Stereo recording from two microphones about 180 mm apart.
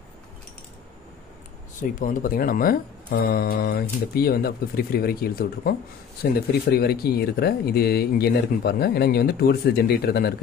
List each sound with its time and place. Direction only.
1.8 s speech: 50° left (ahead or behind)
6.8 s speech: 60° left (ahead or behind)